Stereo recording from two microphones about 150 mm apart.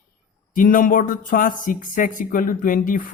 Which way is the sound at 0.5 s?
65° left (ahead or behind).